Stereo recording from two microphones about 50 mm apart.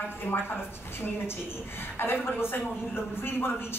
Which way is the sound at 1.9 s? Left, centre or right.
Left.